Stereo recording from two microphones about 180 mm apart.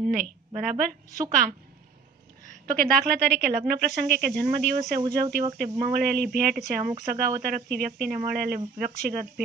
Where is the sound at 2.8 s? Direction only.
60° right (ahead or behind).